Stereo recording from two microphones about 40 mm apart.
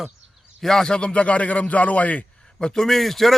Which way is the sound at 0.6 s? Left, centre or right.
Centre.